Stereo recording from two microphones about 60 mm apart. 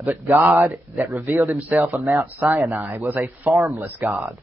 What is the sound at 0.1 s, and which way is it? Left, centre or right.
Speech, right.